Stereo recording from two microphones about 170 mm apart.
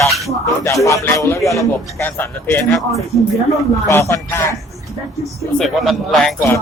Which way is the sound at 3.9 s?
15° left (ahead or behind).